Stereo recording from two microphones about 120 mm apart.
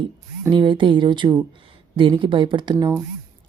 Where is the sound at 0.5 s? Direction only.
45° right (ahead or behind).